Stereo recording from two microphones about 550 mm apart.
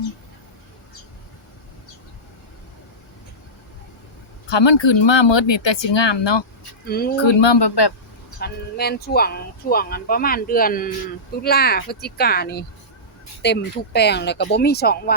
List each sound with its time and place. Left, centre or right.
4.4 s speech: left
6.8 s speech: centre
7.2 s speech: left
8.4 s speech: centre